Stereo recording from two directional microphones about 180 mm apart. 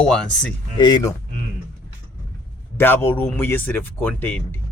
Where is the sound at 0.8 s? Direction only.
25° left (ahead or behind).